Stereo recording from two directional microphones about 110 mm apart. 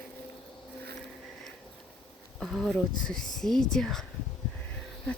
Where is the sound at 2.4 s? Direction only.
5° left (ahead or behind).